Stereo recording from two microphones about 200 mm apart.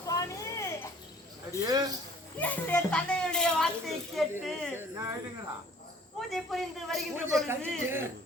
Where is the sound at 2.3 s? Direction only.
10° left (ahead or behind).